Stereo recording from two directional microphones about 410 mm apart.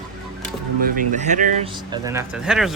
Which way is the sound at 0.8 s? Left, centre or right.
Centre.